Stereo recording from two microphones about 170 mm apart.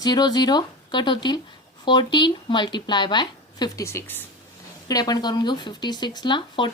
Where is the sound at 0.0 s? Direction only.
25° left (ahead or behind).